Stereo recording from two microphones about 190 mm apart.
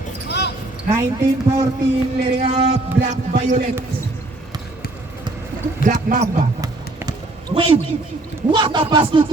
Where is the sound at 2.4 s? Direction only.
30° right (ahead or behind).